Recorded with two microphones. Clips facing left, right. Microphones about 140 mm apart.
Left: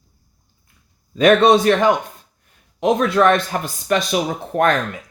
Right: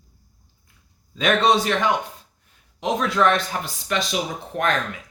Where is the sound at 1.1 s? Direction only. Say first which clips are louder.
Left 7 dB; 50° left (ahead or behind).